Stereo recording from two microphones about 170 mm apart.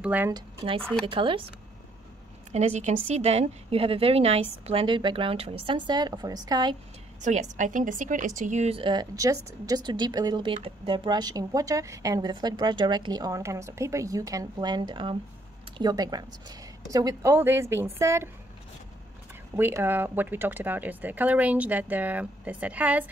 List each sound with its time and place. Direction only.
0.0 s speech: 10° right (ahead or behind)
0.3 s a woman's voice: 30° right (ahead or behind)
2.5 s a woman's voice: 45° right (ahead or behind); by 6.8 s 25° right (ahead or behind)
7.2 s speech: 45° right (ahead or behind); by 18.3 s 15° right (ahead or behind)
19.5 s speech: 15° right (ahead or behind)